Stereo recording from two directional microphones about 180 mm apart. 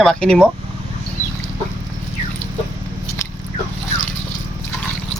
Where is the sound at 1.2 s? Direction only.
45° left (ahead or behind).